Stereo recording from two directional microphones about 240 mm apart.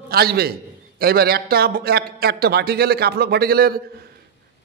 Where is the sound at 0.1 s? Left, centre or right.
Right.